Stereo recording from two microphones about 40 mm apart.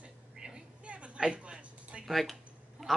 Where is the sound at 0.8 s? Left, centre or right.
Right.